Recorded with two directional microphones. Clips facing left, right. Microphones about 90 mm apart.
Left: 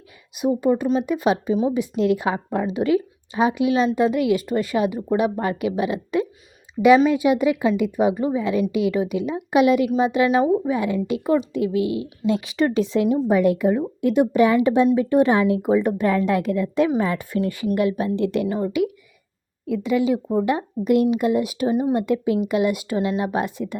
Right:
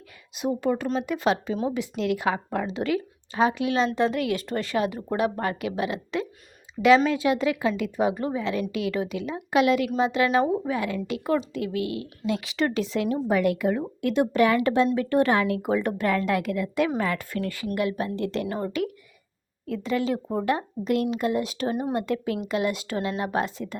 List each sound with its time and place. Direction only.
0.3 s a woman's voice: 15° left (ahead or behind)